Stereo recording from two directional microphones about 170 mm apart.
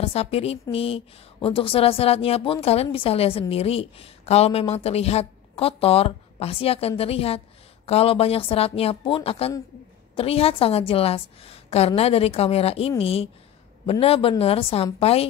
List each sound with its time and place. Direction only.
0.0 s a woman's voice: 35° left (ahead or behind)